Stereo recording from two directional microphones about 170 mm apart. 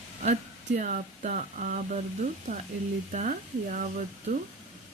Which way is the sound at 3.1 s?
45° right (ahead or behind).